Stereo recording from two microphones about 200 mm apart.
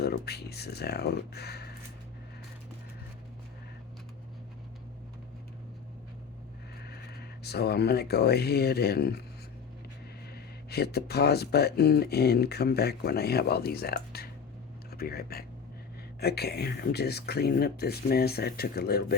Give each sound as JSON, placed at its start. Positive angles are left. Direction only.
{"t": 0.0, "sound": "speech", "side_deg": 55}
{"t": 6.8, "sound": "speech", "side_deg": 55}
{"t": 10.3, "sound": "speech", "side_deg": 55}